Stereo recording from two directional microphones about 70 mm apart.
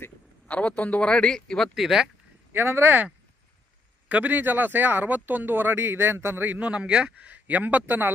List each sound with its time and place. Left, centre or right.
0.4 s a man's voice: left; by 2.0 s centre
2.5 s speech: right
4.1 s speech: right
6.6 s speech: centre